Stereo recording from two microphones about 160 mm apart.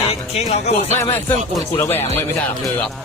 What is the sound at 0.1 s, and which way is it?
Speech, 40° left (ahead or behind).